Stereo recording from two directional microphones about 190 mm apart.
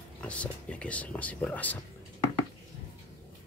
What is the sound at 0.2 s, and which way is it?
Speech, 5° left (ahead or behind).